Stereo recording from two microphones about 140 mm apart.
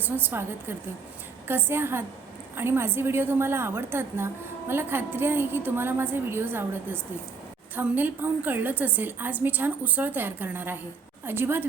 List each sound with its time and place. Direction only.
0.0 s a woman's voice: 15° right (ahead or behind)